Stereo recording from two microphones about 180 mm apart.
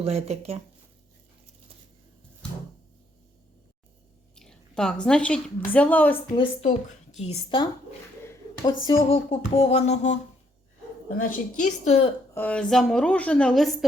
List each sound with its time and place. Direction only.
0.0 s speech: 35° right (ahead or behind)
4.4 s a woman's voice: 5° left (ahead or behind)
6.3 s speech: 30° left (ahead or behind)
7.2 s music: 35° left (ahead or behind)
9.0 s music: 30° left (ahead or behind)
11.2 s a woman's voice: 45° left (ahead or behind)
12.3 s a woman's voice: 10° left (ahead or behind)